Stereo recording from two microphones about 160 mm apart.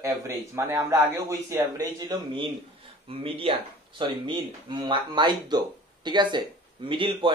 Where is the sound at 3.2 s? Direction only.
35° right (ahead or behind).